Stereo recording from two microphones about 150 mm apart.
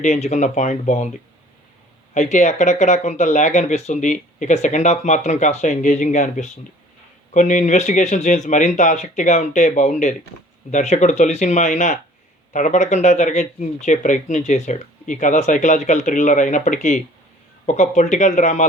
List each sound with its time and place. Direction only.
0.0 s speech: 50° left (ahead or behind)
2.1 s speech: 50° left (ahead or behind)